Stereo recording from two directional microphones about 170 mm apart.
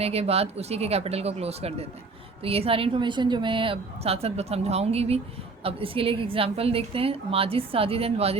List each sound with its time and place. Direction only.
0.0 s a woman's voice: 35° right (ahead or behind)